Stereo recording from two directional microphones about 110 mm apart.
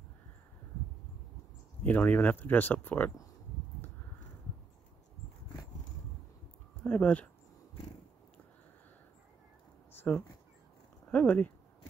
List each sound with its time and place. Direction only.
1.8 s speech: 15° left (ahead or behind)
6.8 s speech: 15° left (ahead or behind)
9.9 s a sound: 15° left (ahead or behind)
11.1 s speech: 15° left (ahead or behind)